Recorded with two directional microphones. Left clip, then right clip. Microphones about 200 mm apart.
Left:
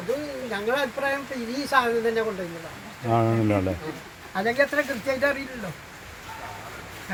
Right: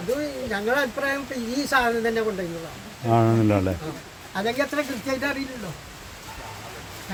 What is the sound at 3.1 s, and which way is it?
Speech, 10° right (ahead or behind).